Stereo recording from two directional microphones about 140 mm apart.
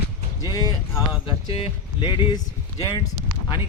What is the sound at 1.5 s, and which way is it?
Speech, 40° left (ahead or behind).